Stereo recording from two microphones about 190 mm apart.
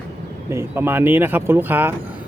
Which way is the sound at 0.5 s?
10° right (ahead or behind).